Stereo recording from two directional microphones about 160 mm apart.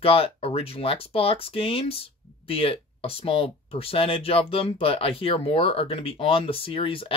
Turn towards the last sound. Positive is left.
turn(degrees=35)  # may be behind; listen again after turning